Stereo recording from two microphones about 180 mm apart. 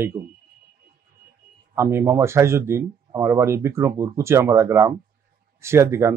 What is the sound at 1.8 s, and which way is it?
Speech, 15° right (ahead or behind).